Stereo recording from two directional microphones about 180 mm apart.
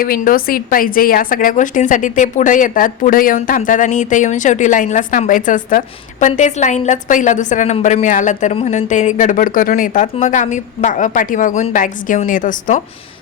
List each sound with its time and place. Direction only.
0.0 s a woman's voice: 55° left (ahead or behind)